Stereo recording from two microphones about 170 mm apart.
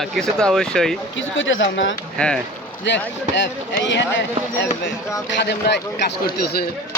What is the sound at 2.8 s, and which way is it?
Speech, 90° left.